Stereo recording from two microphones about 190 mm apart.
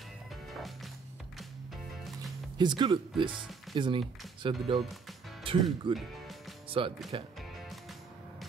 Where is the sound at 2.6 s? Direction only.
25° right (ahead or behind).